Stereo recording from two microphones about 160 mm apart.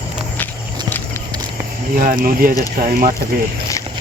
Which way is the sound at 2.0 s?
60° right (ahead or behind).